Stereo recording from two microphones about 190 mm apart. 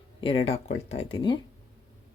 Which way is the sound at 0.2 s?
30° left (ahead or behind).